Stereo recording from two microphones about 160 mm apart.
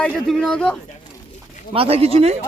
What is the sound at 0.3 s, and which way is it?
Speech, 5° left (ahead or behind).